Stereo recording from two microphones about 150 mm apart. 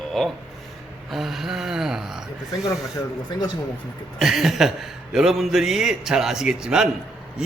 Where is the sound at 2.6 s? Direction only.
20° left (ahead or behind).